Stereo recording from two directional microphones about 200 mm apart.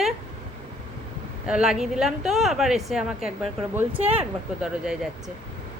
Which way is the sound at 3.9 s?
30° right (ahead or behind).